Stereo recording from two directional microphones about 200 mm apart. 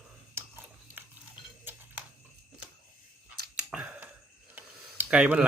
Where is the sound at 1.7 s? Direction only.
10° right (ahead or behind).